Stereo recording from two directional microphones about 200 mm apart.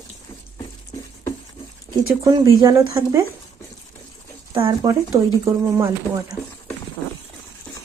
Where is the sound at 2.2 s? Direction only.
20° right (ahead or behind).